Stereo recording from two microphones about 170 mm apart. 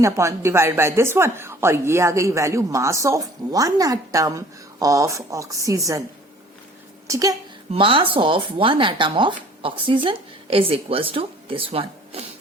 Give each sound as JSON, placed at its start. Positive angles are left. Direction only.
{"t": 0.0, "sound": "a woman's voice", "side_deg": -15}
{"t": 7.1, "sound": "a woman's voice", "side_deg": -20}
{"t": 7.7, "sound": "speech", "side_deg": -30}